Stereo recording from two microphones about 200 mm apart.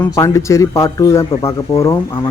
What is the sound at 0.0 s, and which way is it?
Speech, 15° left (ahead or behind).